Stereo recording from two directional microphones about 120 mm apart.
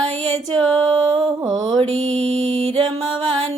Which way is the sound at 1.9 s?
60° right (ahead or behind).